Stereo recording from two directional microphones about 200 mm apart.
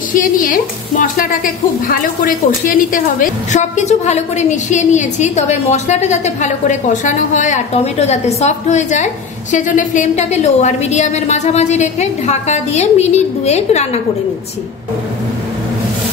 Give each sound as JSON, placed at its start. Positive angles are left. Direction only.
{"t": 0.1, "sound": "a woman's voice", "side_deg": 40}